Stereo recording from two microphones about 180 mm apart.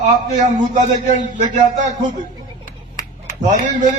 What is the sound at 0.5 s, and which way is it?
A man's voice, 40° right (ahead or behind).